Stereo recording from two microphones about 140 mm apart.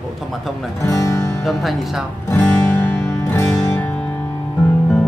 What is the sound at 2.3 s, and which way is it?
Music, 10° left (ahead or behind).